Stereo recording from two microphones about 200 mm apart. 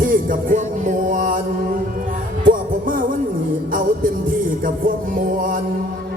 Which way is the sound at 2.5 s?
45° right (ahead or behind).